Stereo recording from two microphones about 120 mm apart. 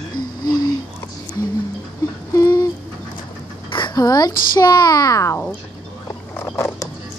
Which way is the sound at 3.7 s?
40° left (ahead or behind).